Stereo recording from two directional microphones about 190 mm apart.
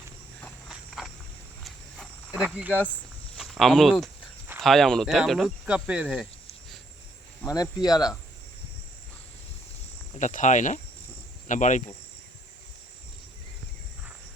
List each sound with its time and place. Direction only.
0.7 s walk: centre (ahead or behind)
1.6 s a sound: centre (ahead or behind)
4.6 s speech: centre (ahead or behind)
7.4 s speech: 20° left (ahead or behind)
10.2 s speech: 40° left (ahead or behind)